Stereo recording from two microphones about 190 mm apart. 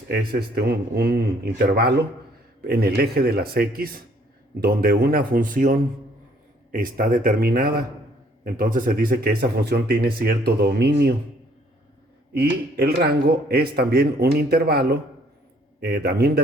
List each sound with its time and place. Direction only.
0.1 s a man's voice: 55° right (ahead or behind)
12.3 s a man's voice: 55° right (ahead or behind)